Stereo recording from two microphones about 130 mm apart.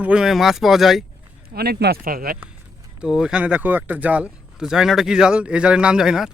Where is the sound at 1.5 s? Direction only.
80° right.